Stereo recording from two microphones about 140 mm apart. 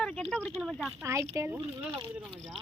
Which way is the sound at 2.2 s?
5° right (ahead or behind).